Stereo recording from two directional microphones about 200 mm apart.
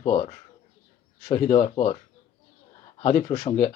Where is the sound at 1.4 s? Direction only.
35° left (ahead or behind).